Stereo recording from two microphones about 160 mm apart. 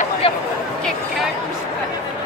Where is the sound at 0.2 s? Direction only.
35° left (ahead or behind).